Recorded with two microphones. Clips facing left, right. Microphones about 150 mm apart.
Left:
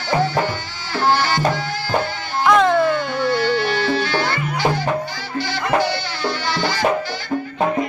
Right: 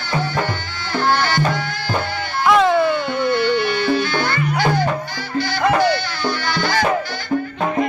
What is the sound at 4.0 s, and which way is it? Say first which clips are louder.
Music: right 1 dB; 30° left (ahead or behind).